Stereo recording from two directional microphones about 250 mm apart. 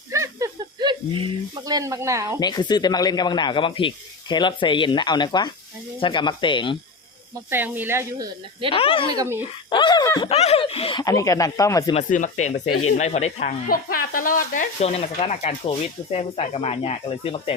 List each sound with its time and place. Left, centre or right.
0.1 s snake: centre
2.4 s speech: centre
7.3 s speech: centre
8.7 s speech: left
9.1 s speech: centre
9.6 s speech: centre
11.9 s speech: left
12.6 s speech: left
13.0 s speech: left